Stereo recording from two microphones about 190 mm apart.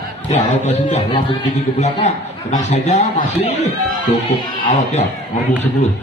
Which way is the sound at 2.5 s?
40° left (ahead or behind).